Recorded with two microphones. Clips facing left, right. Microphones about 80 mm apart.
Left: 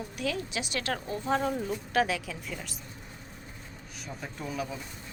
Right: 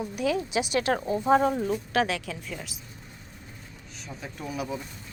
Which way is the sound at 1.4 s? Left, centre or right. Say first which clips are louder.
Right 5 dB; centre.